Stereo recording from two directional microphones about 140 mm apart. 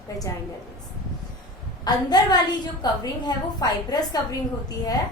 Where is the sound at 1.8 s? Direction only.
30° left (ahead or behind).